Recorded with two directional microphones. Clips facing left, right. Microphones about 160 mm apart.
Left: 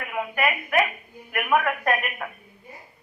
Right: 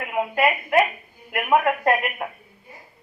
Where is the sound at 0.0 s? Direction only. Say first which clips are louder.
Right 4 dB; 25° right (ahead or behind).